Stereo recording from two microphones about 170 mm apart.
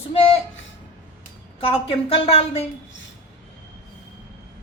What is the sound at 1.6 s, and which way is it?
A woman's voice, 35° left (ahead or behind).